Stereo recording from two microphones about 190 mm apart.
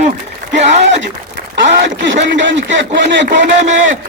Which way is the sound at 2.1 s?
75° right (ahead or behind).